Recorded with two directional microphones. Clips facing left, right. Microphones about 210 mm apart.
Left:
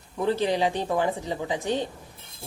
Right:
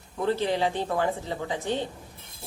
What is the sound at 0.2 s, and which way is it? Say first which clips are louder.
Speech: left 2 dB; 15° left (ahead or behind).